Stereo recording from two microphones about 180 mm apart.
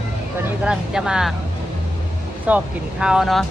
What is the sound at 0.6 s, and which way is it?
Speech, 5° right (ahead or behind).